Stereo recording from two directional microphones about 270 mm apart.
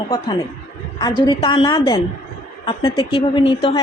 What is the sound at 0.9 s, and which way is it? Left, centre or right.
A woman's voice, centre.